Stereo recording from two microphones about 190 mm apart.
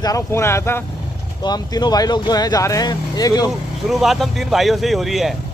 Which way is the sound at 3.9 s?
Centre (ahead or behind).